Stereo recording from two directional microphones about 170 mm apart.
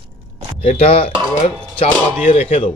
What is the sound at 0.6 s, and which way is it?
Speech, 35° left (ahead or behind).